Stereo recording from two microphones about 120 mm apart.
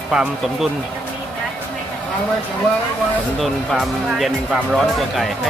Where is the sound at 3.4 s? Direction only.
Centre (ahead or behind).